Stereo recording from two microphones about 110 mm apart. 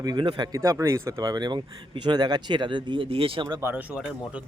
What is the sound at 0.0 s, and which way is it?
Speech, 35° right (ahead or behind).